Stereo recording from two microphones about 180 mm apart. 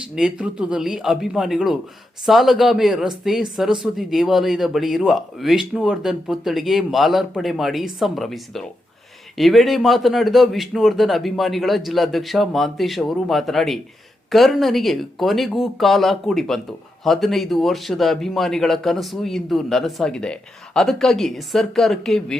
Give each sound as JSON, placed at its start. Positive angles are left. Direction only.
{"t": 0.2, "sound": "speech", "side_deg": -5}